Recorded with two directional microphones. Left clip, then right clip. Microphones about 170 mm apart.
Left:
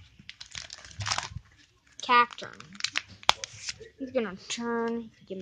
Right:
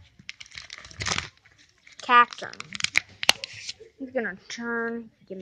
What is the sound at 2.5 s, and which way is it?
Speech, 55° right (ahead or behind).